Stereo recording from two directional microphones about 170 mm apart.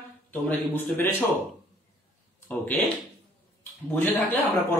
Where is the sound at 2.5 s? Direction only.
10° left (ahead or behind).